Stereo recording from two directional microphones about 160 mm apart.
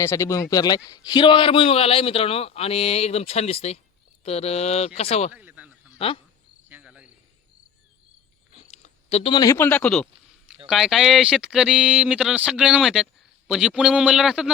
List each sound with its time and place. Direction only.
0.0 s a man's voice: 15° left (ahead or behind); by 5.3 s 40° left (ahead or behind)
5.3 s a sound: 10° right (ahead or behind)
6.0 s a man's voice: 35° left (ahead or behind)
6.7 s cricket: 10° right (ahead or behind)
8.7 s a sound: 40° left (ahead or behind)
9.3 s speech: 25° left (ahead or behind)
9.6 s speech: 10° left (ahead or behind)